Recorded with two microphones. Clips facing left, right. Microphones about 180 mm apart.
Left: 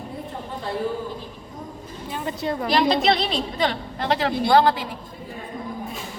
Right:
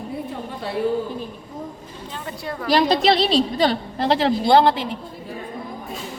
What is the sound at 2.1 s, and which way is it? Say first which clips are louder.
Speech: left 5 dB; 20° left (ahead or behind).